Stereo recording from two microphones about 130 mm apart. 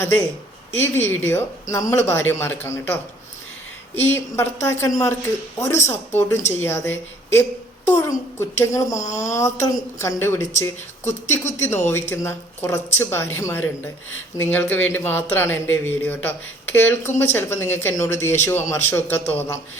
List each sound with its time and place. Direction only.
0.8 s speech: 20° left (ahead or behind)